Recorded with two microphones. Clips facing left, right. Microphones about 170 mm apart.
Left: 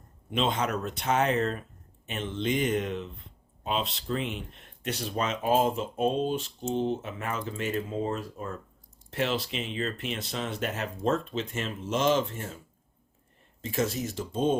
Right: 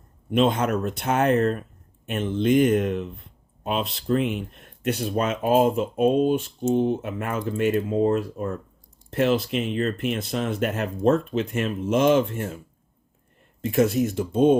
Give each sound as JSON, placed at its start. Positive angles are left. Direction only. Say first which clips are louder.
{"t": 0.3, "sound": "speech", "louder": "right 7 dB", "side_deg": -55}
{"t": 13.6, "sound": "speech", "louder": "right 9 dB", "side_deg": -60}